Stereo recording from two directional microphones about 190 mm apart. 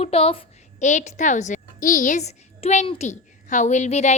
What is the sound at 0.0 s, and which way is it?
A woman's voice, 30° left (ahead or behind).